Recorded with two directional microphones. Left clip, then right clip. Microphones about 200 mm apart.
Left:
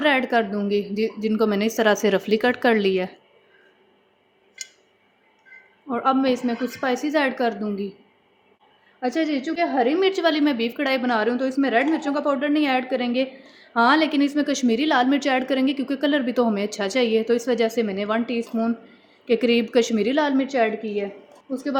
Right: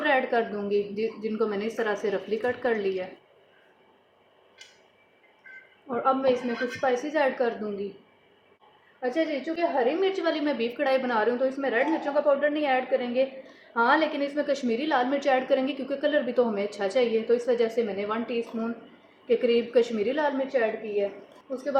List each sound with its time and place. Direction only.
0.0 s a woman's voice: 45° left (ahead or behind)
5.9 s a woman's voice: 35° left (ahead or behind)
6.8 s a woman's voice: 45° left (ahead or behind)
9.0 s a woman's voice: 60° left (ahead or behind)